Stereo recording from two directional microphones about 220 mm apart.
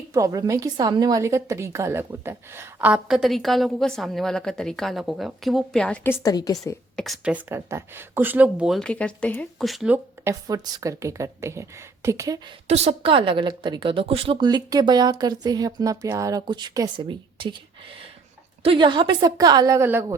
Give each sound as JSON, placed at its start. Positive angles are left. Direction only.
{"t": 0.1, "sound": "a woman's voice", "side_deg": -15}
{"t": 6.9, "sound": "speech", "side_deg": 0}
{"t": 12.6, "sound": "a woman's voice", "side_deg": -30}
{"t": 18.6, "sound": "speech", "side_deg": -25}